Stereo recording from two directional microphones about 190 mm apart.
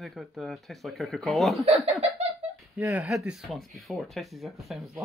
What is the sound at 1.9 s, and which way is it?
Laughter, 35° right (ahead or behind).